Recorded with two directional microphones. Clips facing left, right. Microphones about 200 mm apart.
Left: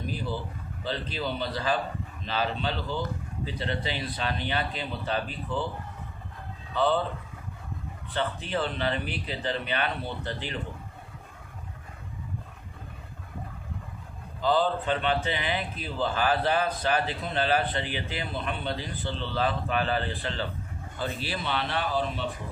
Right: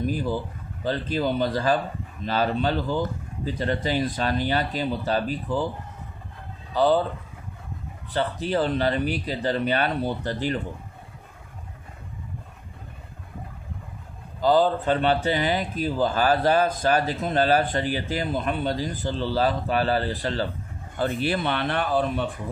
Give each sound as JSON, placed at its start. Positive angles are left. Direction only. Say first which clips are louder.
{"t": 0.0, "sound": "speech", "louder": "right 7 dB", "side_deg": -45}
{"t": 6.7, "sound": "speech", "louder": "right 5 dB", "side_deg": -40}
{"t": 8.1, "sound": "speech", "louder": "right 5 dB", "side_deg": -35}
{"t": 14.4, "sound": "speech", "louder": "right 5 dB", "side_deg": -40}
{"t": 21.0, "sound": "speech", "louder": "right 8 dB", "side_deg": -55}